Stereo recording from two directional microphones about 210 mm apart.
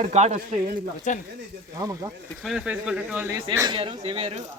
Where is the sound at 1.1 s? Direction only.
35° left (ahead or behind).